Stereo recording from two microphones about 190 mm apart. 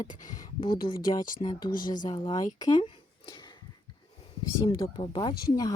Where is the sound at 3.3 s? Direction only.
20° left (ahead or behind).